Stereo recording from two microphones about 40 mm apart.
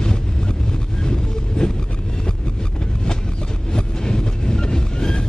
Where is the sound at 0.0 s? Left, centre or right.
Centre.